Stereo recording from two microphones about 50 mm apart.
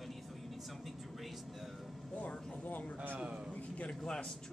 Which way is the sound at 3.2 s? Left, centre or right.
Centre.